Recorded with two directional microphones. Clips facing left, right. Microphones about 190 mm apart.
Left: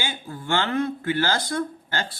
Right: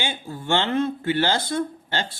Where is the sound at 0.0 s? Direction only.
20° right (ahead or behind).